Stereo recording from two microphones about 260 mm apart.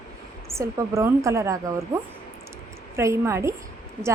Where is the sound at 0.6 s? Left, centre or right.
Centre.